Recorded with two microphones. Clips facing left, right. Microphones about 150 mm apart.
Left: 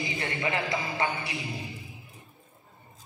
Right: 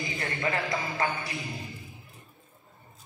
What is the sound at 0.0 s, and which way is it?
A man's voice, 20° left (ahead or behind).